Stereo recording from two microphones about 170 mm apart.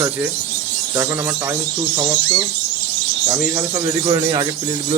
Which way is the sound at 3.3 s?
10° right (ahead or behind).